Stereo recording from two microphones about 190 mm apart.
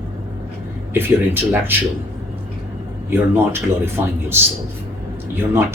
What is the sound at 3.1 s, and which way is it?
Speech, 10° right (ahead or behind).